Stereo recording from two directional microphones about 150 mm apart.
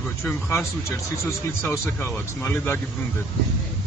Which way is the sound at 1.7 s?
15° left (ahead or behind).